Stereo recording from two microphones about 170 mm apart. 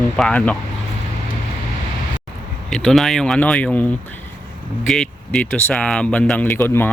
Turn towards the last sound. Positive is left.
turn(degrees=10)  # may be behind; listen again after turning